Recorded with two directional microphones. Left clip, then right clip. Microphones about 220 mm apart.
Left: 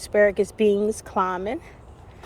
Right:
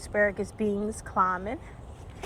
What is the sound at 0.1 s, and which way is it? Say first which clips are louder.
Speech: left 7 dB; 45° left (ahead or behind).